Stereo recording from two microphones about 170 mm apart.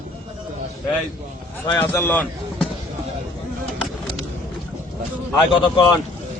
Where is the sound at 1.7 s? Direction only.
10° left (ahead or behind).